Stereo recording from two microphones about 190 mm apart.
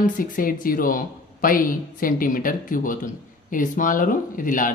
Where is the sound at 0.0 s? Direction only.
45° left (ahead or behind).